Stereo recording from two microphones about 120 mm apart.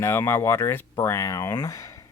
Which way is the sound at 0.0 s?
20° left (ahead or behind).